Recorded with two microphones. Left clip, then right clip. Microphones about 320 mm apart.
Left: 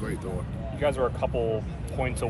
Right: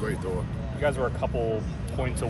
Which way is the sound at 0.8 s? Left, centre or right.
Left.